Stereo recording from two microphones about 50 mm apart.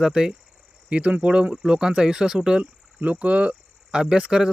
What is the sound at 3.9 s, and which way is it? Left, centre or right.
Speech, centre.